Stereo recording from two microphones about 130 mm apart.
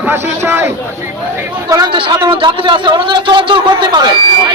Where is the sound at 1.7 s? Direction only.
35° right (ahead or behind).